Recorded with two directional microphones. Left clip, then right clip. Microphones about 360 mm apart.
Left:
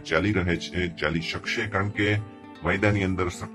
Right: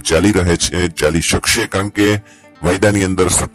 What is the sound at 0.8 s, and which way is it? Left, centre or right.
Speech, right.